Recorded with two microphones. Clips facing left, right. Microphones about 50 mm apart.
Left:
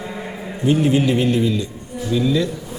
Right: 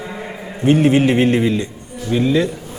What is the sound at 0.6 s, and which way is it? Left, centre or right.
A man's voice, right.